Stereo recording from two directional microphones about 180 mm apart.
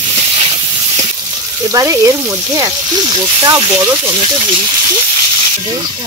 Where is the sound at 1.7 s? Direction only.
20° right (ahead or behind).